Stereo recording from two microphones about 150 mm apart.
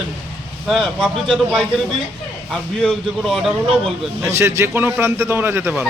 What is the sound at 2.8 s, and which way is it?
Speech, centre (ahead or behind).